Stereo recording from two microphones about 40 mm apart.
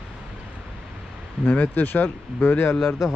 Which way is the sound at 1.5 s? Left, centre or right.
Left.